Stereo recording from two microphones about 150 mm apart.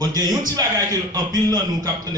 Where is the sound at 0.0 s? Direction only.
25° right (ahead or behind).